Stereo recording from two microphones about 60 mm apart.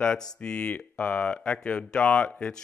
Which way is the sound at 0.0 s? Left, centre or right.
Centre.